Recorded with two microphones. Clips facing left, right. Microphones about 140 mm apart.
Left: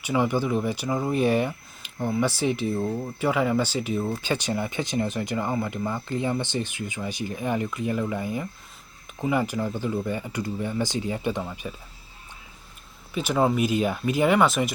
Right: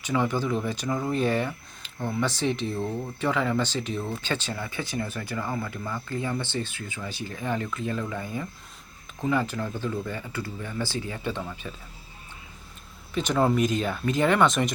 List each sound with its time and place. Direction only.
0.0 s speech: 10° left (ahead or behind)
13.1 s speech: 5° left (ahead or behind)